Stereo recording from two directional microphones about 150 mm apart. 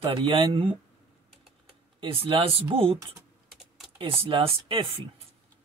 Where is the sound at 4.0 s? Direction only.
35° right (ahead or behind).